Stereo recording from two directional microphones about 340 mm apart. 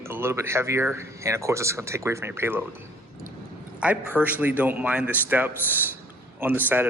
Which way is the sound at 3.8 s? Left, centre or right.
Centre.